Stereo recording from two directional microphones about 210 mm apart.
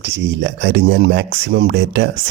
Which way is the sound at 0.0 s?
55° right (ahead or behind).